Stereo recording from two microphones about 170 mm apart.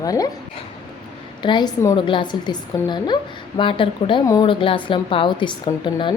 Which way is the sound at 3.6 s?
30° left (ahead or behind).